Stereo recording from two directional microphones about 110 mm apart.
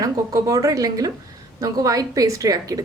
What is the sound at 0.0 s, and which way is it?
Speech, 30° right (ahead or behind).